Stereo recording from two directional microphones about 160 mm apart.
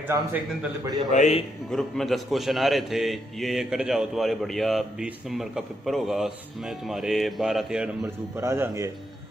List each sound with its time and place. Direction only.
0.0 s a man's voice: 10° right (ahead or behind)
1.1 s a man's voice: 45° left (ahead or behind)
1.7 s a man's voice: centre (ahead or behind)
8.4 s a man's voice: 20° right (ahead or behind)